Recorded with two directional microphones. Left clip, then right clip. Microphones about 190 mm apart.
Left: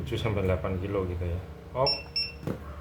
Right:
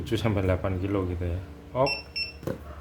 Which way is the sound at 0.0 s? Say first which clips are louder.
Right 2 dB; 55° right (ahead or behind).